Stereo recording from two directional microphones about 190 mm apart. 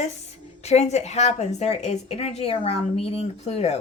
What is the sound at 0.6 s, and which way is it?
A woman's voice, 35° left (ahead or behind).